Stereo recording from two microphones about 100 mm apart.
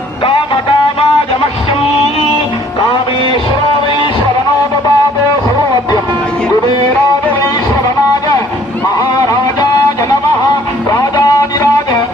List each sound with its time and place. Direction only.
0.3 s music: 60° left (ahead or behind)
10.8 s music: 30° left (ahead or behind)